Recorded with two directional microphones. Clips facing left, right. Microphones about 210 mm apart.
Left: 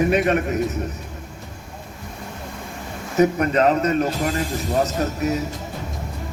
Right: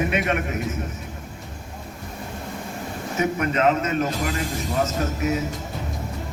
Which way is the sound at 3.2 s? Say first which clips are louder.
Left 5 dB; 35° left (ahead or behind).